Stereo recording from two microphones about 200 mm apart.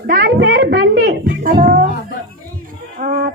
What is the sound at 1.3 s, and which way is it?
Music, 40° right (ahead or behind).